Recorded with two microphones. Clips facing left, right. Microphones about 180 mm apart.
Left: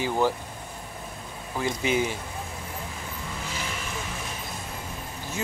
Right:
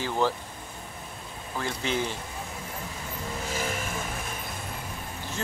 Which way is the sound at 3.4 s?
45° right (ahead or behind).